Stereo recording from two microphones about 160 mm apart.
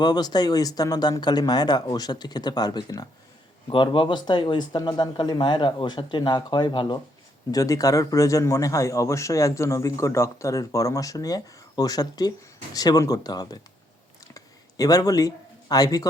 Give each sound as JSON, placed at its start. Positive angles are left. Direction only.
{"t": 0.0, "sound": "speech", "side_deg": 25}
{"t": 14.3, "sound": "a sound", "side_deg": 20}
{"t": 15.7, "sound": "speech", "side_deg": 25}